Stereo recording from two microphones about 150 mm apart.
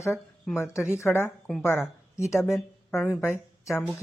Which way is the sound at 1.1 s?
5° left (ahead or behind).